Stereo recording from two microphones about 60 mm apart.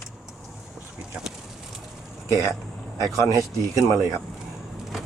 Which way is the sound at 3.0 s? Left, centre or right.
Right.